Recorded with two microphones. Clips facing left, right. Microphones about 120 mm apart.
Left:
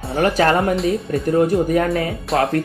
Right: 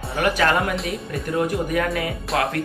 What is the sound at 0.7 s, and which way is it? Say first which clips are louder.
Speech: left 8 dB; centre (ahead or behind).